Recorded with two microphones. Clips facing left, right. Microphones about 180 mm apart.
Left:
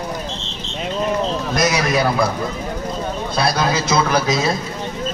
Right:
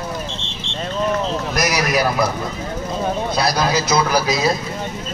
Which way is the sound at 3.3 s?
25° left (ahead or behind).